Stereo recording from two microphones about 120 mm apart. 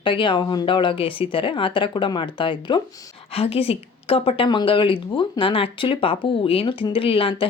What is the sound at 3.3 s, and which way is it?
A woman's voice, 55° left (ahead or behind).